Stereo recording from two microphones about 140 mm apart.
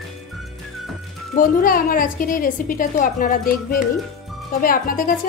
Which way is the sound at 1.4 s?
85° left.